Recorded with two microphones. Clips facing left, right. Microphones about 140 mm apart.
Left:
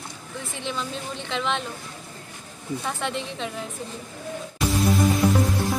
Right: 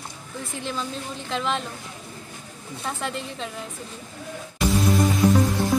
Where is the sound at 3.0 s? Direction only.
Centre (ahead or behind).